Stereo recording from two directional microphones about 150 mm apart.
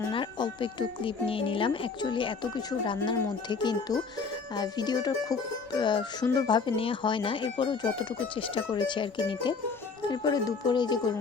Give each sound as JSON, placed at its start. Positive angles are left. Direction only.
{"t": 0.1, "sound": "music", "side_deg": 30}
{"t": 10.1, "sound": "speech", "side_deg": 25}